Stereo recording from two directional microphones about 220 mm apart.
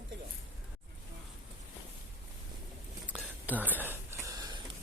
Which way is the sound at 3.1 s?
5° right (ahead or behind).